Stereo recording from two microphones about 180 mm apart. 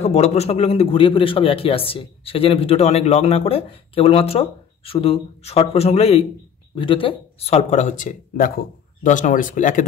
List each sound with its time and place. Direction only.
0.0 s a man's voice: 35° left (ahead or behind)